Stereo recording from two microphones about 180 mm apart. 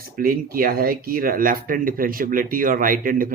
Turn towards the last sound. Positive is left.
turn(degrees=-50)  # may be behind; listen again after turning